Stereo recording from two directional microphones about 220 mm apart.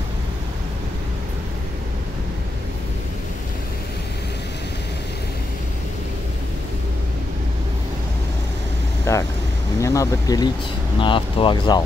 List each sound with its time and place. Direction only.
9.1 s vehicle: 15° left (ahead or behind)
9.8 s speech: 15° left (ahead or behind)